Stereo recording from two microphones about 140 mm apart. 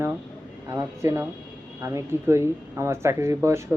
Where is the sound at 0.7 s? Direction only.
20° right (ahead or behind).